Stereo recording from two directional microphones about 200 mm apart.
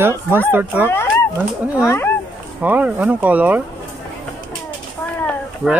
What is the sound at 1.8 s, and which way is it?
Speech, 15° left (ahead or behind).